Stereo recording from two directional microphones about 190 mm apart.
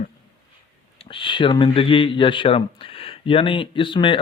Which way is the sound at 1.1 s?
25° left (ahead or behind).